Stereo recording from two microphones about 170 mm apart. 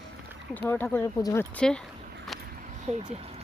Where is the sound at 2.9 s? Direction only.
40° right (ahead or behind).